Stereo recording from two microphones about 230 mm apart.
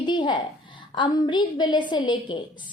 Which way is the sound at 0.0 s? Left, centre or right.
Centre.